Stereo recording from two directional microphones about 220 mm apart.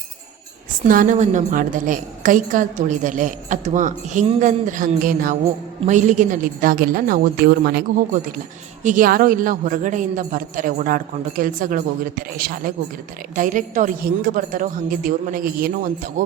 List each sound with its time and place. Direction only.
0.9 s a woman's voice: 35° right (ahead or behind)